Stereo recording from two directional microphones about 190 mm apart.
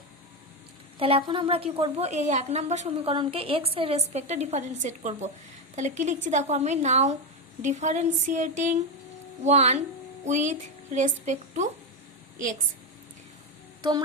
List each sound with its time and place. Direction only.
0.9 s a woman's voice: 30° right (ahead or behind)